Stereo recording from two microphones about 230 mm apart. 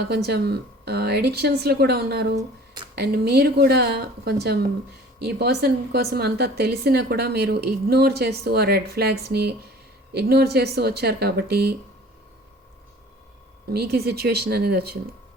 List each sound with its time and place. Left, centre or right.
0.1 s speech: right
13.7 s speech: right